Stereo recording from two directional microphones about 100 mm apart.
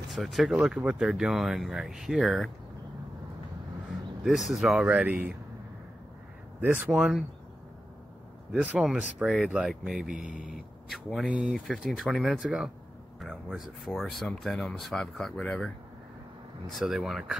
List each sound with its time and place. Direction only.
0.1 s speech: centre (ahead or behind)
4.2 s speech: centre (ahead or behind)
4.8 s speech: 15° right (ahead or behind)
6.9 s speech: centre (ahead or behind)
8.5 s speech: 10° right (ahead or behind); by 15.7 s 5° left (ahead or behind)
16.7 s speech: centre (ahead or behind)